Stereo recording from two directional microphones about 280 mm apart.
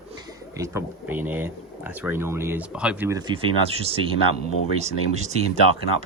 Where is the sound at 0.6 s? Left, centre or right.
Centre.